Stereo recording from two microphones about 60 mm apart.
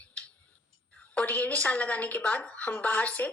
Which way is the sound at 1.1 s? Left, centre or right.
Left.